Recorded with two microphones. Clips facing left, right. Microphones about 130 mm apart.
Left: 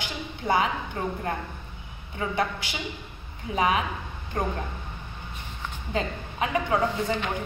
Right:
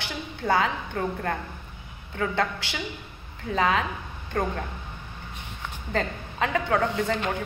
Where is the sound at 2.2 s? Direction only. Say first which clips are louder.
Right 2 dB; 20° left (ahead or behind).